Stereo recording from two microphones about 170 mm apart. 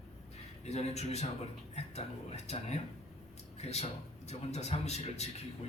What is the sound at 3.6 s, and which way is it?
A man's voice, 40° left (ahead or behind).